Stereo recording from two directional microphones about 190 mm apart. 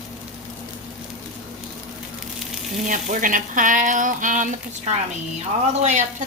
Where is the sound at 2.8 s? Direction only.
45° right (ahead or behind).